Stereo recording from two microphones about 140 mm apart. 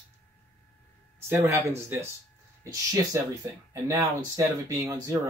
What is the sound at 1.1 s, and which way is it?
Speech, 15° right (ahead or behind).